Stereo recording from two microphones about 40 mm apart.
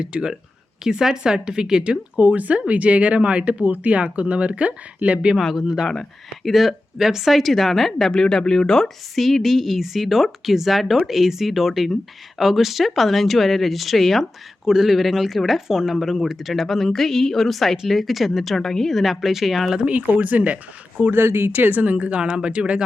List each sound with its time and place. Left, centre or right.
0.0 s a woman's voice: centre
2.1 s speech: right
5.5 s a woman's voice: centre
6.4 s speech: centre
8.1 s speech: centre
9.1 s speech: centre
14.6 s speech: centre
19.8 s speech: right
21.1 s speech: right
21.5 s speech: right
21.9 s speech: right